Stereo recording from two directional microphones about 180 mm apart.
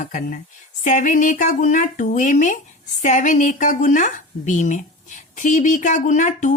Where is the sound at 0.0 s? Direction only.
45° left (ahead or behind).